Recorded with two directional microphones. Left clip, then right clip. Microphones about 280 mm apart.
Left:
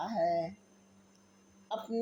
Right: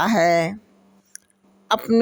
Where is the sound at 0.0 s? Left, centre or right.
Right.